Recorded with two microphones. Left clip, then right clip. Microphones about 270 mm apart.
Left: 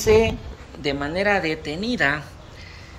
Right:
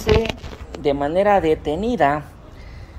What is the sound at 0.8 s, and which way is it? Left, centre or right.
Speech, centre.